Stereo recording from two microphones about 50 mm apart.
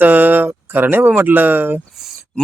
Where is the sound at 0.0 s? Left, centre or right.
Right.